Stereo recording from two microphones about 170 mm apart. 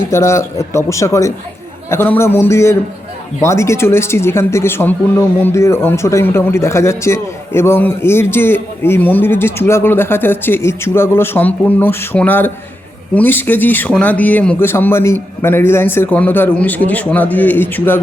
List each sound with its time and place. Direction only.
0.1 s speech: 15° left (ahead or behind)